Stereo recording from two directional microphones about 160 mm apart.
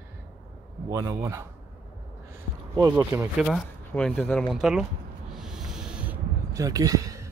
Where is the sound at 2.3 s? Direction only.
20° right (ahead or behind).